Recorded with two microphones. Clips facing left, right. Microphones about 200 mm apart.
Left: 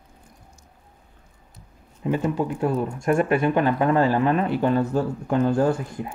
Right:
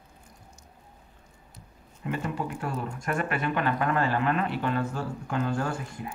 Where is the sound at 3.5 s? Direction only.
25° left (ahead or behind).